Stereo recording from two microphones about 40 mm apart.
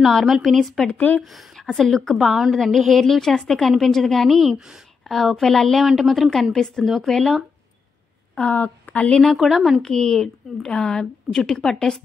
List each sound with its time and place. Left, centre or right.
0.0 s a woman's voice: centre
0.9 s speech: left
1.2 s a woman's voice: centre
2.2 s a woman's voice: centre
4.6 s a woman's voice: centre
5.0 s speech: centre
5.9 s a woman's voice: centre
6.5 s a woman's voice: centre
8.5 s a woman's voice: left
9.3 s a woman's voice: centre
9.9 s speech: centre